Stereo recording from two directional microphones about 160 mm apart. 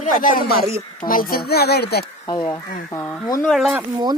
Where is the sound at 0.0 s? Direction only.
60° left (ahead or behind); by 2.0 s 85° left.